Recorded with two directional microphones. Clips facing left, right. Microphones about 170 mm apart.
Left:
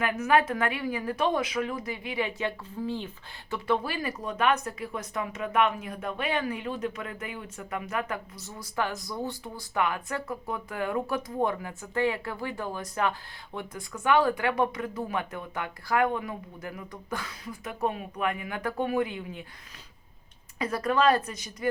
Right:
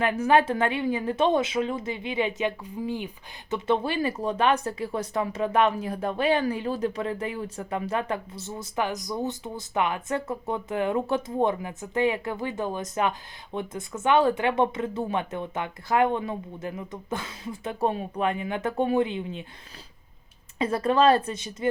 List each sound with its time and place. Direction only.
0.0 s speech: 30° right (ahead or behind); by 3.1 s 15° right (ahead or behind)
3.5 s speech: 25° right (ahead or behind)
20.6 s speech: 25° right (ahead or behind)